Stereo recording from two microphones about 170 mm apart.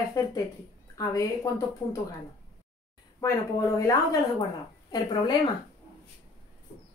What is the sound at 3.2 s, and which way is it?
Speech, 15° left (ahead or behind).